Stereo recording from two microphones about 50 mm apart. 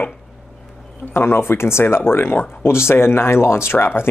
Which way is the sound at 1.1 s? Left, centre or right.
Left.